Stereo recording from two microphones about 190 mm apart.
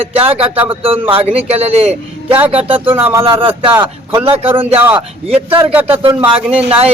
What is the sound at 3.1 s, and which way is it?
Speech, 15° right (ahead or behind).